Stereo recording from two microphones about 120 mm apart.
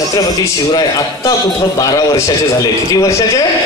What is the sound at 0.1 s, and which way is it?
A man's voice, 30° left (ahead or behind).